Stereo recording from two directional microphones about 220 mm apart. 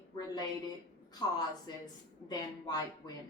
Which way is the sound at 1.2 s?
20° left (ahead or behind).